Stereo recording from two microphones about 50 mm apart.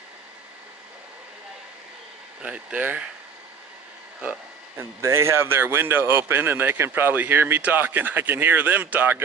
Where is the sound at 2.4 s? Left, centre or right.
Right.